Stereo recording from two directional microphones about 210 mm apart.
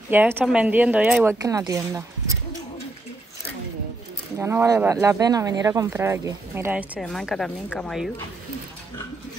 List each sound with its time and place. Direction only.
0.1 s speech: 10° right (ahead or behind)
4.4 s speech: 10° right (ahead or behind)